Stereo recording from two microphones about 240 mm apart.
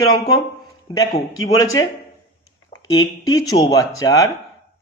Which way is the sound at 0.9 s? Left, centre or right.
Centre.